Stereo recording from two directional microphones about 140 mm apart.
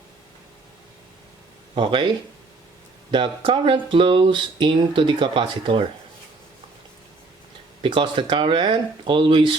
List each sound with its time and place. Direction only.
1.7 s speech: 35° right (ahead or behind)
7.8 s speech: 35° right (ahead or behind)